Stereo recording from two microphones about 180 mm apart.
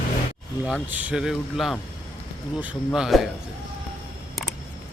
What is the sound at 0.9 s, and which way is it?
Speech, 10° right (ahead or behind).